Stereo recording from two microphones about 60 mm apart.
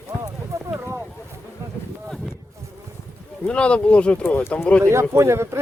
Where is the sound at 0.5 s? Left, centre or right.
Right.